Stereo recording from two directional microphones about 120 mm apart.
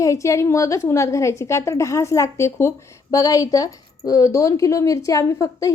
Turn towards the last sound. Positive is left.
turn(degrees=25)  # may be behind; listen again after turning